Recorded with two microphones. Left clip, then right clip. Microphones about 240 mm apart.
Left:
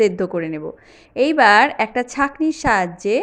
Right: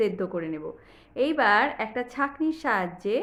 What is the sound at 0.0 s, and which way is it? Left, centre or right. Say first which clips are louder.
A woman's voice: left 9 dB; left.